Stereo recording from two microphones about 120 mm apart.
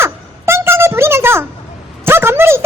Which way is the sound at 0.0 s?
20° right (ahead or behind).